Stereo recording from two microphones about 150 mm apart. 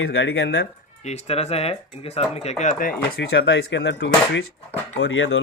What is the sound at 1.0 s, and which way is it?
Speech, 50° left (ahead or behind).